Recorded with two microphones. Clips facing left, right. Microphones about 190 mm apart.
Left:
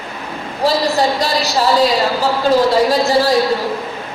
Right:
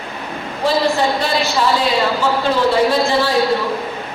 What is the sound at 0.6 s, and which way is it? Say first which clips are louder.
A woman's voice: left 1 dB; 40° left (ahead or behind).